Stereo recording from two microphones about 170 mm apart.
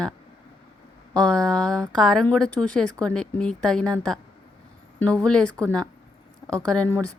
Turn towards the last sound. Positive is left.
turn(degrees=10)  # may be behind; listen again after turning